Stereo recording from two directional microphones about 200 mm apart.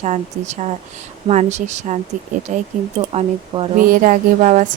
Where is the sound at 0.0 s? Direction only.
35° right (ahead or behind).